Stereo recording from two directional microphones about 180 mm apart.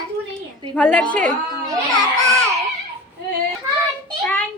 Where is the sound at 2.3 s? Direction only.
15° right (ahead or behind).